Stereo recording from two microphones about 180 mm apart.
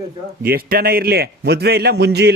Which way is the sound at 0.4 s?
60° right (ahead or behind).